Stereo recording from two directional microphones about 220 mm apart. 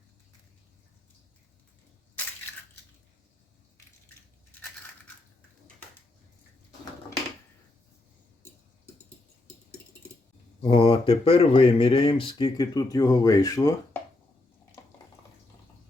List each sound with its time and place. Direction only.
10.6 s speech: 25° left (ahead or behind)